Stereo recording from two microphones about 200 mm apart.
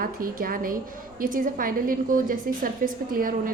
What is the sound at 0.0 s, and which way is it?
A woman's voice, 45° right (ahead or behind).